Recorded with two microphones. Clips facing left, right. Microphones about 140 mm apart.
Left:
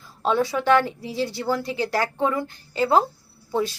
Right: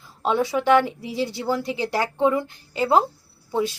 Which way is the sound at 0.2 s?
15° right (ahead or behind).